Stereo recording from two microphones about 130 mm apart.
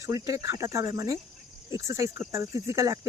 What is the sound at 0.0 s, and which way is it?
Speech, 25° right (ahead or behind).